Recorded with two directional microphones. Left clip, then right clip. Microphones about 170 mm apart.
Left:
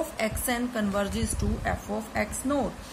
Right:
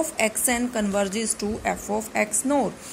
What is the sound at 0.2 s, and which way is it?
A woman's voice, 15° right (ahead or behind).